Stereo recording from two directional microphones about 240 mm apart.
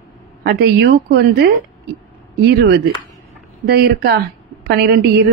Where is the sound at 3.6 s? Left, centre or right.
Right.